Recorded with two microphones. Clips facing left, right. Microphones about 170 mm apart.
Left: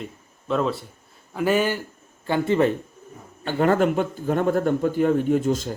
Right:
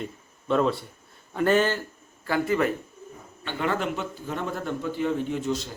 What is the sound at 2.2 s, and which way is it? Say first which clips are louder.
Speech: left 4 dB; 25° left (ahead or behind).